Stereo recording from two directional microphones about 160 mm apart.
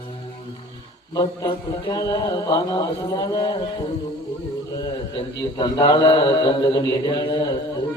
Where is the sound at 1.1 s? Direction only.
25° left (ahead or behind).